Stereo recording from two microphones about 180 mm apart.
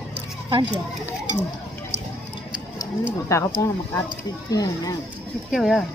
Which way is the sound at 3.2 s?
15° left (ahead or behind).